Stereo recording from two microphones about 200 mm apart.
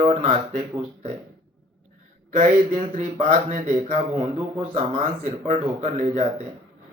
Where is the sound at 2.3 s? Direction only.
40° right (ahead or behind).